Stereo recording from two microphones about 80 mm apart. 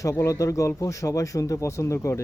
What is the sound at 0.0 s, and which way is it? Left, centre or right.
Speech, left.